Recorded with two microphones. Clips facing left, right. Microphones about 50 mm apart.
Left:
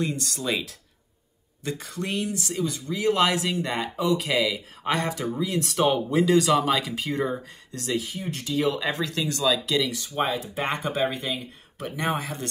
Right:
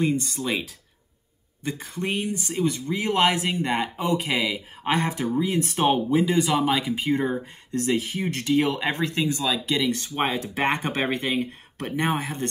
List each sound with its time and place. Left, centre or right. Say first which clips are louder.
0.0 s speech: right 4 dB; centre
6.0 s speech: left 1 dB; centre; by 8.1 s right
8.1 s speech: right 6 dB; right
9.8 s speech: right 2 dB; right
10.4 s speech: right 3 dB; right
12.0 s speech: right 2 dB; right